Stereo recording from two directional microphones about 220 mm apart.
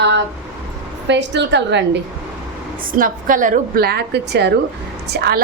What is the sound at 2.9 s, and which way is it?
A woman's voice, 40° right (ahead or behind).